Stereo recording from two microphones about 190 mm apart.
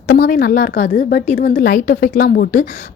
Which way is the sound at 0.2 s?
50° left (ahead or behind).